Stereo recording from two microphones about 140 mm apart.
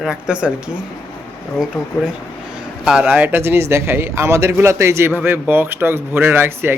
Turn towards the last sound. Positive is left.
turn(degrees=-15)  # may be behind; listen again after turning